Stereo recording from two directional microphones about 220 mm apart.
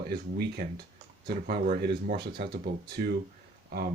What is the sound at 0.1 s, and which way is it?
Speech, 45° right (ahead or behind).